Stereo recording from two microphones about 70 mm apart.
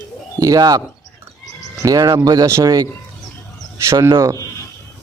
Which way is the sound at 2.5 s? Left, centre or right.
Right.